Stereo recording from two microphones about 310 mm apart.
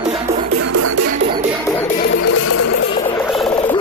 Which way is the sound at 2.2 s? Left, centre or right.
Left.